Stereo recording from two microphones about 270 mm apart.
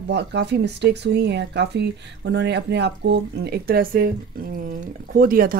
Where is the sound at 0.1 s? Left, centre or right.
Right.